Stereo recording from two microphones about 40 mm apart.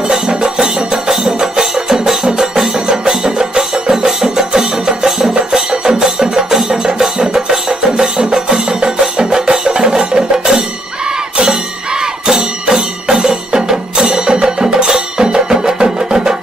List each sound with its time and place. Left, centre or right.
0.3 s music: centre
12.0 s music: centre